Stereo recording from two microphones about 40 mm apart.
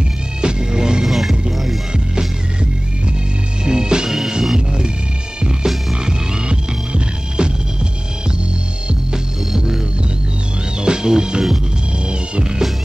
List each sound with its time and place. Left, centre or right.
0.4 s music: right
1.0 s music: centre
3.6 s music: centre
6.0 s music: right
10.8 s music: centre